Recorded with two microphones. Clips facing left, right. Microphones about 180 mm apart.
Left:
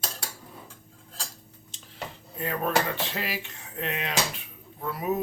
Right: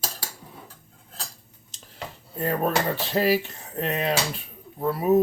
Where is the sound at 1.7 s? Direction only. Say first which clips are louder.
Right 1 dB; 40° right (ahead or behind).